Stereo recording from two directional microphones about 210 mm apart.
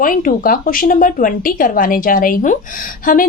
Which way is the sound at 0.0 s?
40° left (ahead or behind).